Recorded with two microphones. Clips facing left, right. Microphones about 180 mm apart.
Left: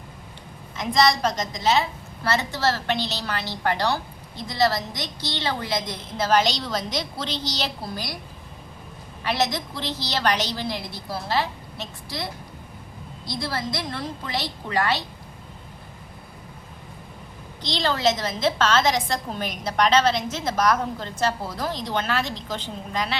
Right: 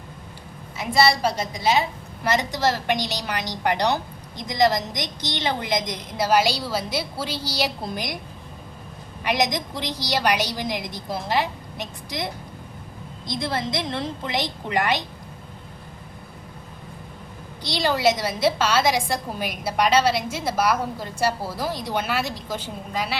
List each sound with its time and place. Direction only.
0.8 s a woman's voice: 10° right (ahead or behind)
7.8 s a woman's voice: 20° right (ahead or behind)
9.2 s a woman's voice: 15° right (ahead or behind)
17.6 s a woman's voice: 10° right (ahead or behind)